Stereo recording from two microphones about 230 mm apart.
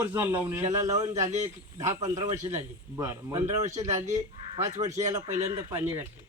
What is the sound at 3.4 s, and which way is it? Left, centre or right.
Speech, right.